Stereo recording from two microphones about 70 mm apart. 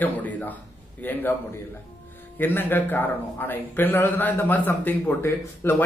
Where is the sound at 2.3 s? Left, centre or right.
Left.